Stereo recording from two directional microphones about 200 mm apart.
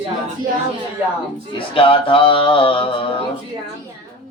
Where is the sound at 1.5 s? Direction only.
25° left (ahead or behind).